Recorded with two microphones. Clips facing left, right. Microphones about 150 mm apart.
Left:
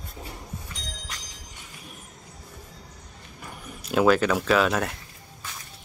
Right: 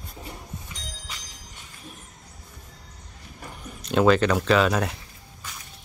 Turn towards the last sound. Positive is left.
turn(degrees=0)  # may be behind; listen again after turning